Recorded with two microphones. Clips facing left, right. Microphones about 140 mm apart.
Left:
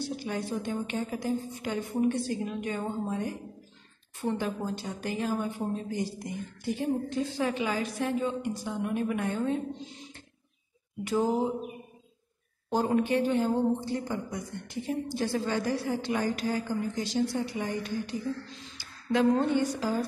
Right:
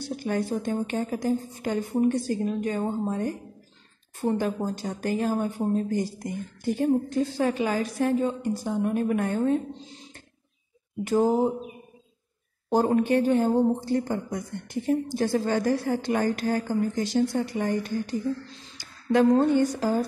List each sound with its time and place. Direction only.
0.1 s a woman's voice: 50° right (ahead or behind)
11.1 s a woman's voice: 45° right (ahead or behind)
12.8 s a woman's voice: 45° right (ahead or behind)